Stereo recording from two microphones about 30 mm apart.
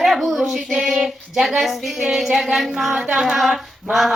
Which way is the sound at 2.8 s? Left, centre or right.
Centre.